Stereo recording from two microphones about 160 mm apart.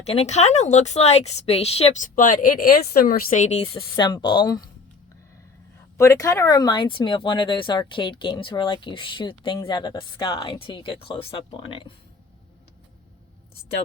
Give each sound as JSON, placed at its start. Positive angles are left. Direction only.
{"t": 0.0, "sound": "a woman's voice", "side_deg": 40}
{"t": 3.8, "sound": "speech", "side_deg": 25}
{"t": 6.0, "sound": "speech", "side_deg": 20}